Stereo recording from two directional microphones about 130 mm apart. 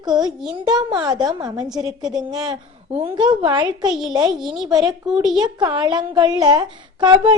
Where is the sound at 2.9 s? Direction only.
45° right (ahead or behind).